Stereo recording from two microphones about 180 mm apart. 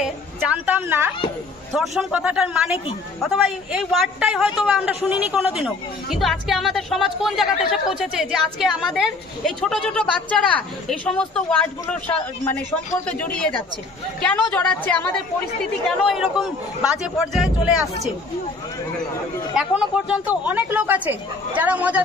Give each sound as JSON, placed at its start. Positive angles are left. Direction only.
{"t": 0.0, "sound": "a woman's voice", "side_deg": -10}
{"t": 1.7, "sound": "a man's voice", "side_deg": 0}
{"t": 20.1, "sound": "a woman's voice", "side_deg": -10}